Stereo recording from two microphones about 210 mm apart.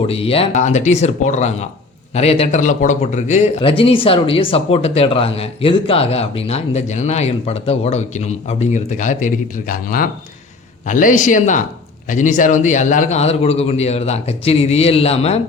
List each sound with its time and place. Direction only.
0.0 s speech: 25° left (ahead or behind)